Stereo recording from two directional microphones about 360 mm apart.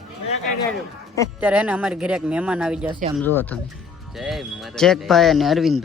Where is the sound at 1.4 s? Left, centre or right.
Centre.